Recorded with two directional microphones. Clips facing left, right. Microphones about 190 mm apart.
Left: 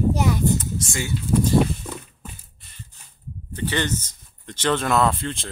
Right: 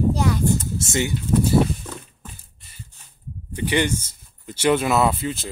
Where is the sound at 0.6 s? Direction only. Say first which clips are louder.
Right 4 dB; 25° right (ahead or behind).